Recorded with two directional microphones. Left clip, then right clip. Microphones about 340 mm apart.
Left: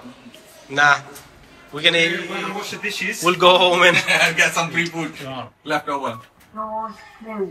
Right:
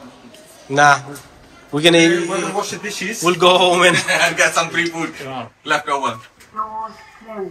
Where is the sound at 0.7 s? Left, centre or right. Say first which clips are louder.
Right 3 dB; centre.